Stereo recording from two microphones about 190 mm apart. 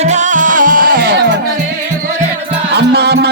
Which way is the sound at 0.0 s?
40° right (ahead or behind).